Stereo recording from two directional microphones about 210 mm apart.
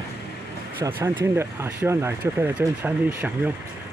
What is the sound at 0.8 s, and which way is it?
Speech, 20° right (ahead or behind).